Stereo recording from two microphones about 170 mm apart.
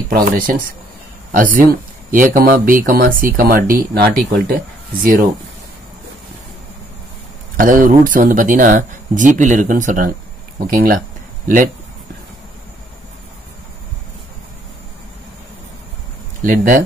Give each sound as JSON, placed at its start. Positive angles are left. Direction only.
{"t": 0.1, "sound": "speech", "side_deg": -55}
{"t": 7.5, "sound": "speech", "side_deg": -50}
{"t": 16.4, "sound": "speech", "side_deg": -55}